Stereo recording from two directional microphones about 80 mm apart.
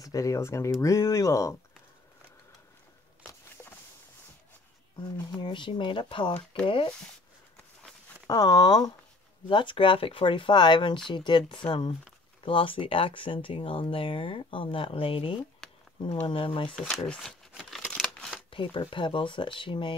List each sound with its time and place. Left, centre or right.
0.0 s speech: left
5.4 s speech: left
8.3 s speech: left
9.5 s speech: left
15.6 s a sound: centre
16.3 s speech: left
17.6 s a sound: centre
18.5 s speech: left